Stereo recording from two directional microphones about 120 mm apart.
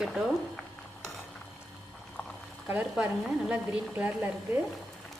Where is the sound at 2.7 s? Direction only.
15° right (ahead or behind).